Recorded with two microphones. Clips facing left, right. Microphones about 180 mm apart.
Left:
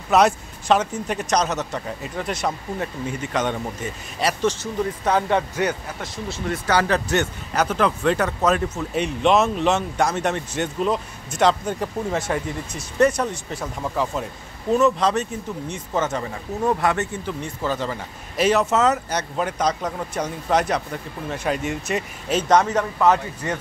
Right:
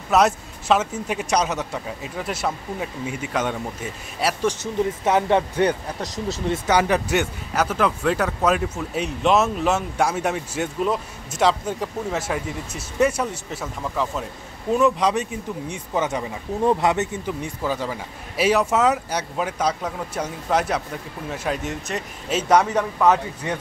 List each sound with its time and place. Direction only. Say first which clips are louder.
0.1 s speech: left 1 dB; 5° right (ahead or behind)
5.0 s speech: right 1 dB; 20° right (ahead or behind); by 6.4 s 40° right (ahead or behind)
6.5 s speech: right 1 dB; 15° right (ahead or behind)
15.0 s a man's voice: even; 15° right (ahead or behind)
22.5 s a man's voice: right 1 dB; 10° right (ahead or behind)